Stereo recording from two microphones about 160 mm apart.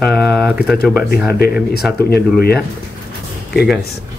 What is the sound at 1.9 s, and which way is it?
Speech, 75° left (ahead or behind).